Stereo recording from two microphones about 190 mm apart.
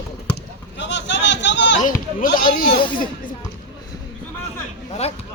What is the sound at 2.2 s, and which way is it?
Speech, 45° left (ahead or behind).